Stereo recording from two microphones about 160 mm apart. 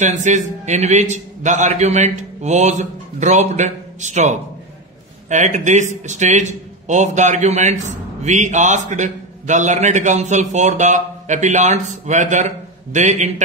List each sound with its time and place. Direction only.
0.0 s a man's voice: 50° right (ahead or behind)